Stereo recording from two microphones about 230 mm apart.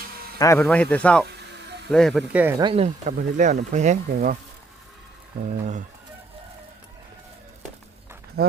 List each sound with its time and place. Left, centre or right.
0.3 s speech: centre
2.6 s speech: right
5.4 s speech: right
8.4 s speech: right